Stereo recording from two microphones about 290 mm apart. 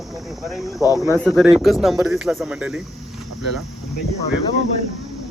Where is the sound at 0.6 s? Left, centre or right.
Centre.